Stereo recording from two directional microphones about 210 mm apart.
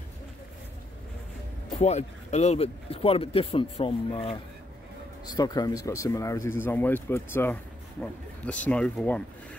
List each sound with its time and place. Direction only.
1.8 s speech: 30° left (ahead or behind); by 9.2 s 5° left (ahead or behind)